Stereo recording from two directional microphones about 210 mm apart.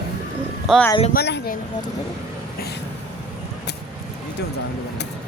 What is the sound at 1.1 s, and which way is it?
Speech, 50° left (ahead or behind).